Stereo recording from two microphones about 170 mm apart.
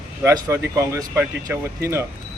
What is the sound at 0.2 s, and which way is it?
A man's voice, 20° right (ahead or behind).